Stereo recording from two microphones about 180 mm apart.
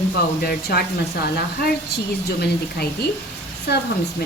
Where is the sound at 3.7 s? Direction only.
65° left (ahead or behind).